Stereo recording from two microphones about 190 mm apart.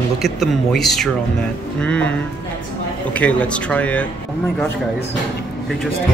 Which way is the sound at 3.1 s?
5° left (ahead or behind).